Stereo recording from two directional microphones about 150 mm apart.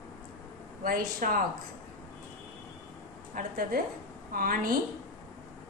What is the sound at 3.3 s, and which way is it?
A woman's voice, 70° right (ahead or behind).